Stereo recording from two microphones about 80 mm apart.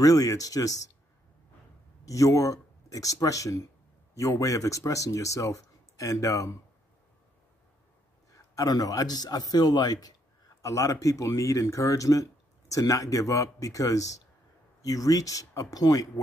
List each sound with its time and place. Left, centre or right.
0.0 s speech: left
2.0 s speech: left
8.4 s a man's voice: left
10.6 s speech: left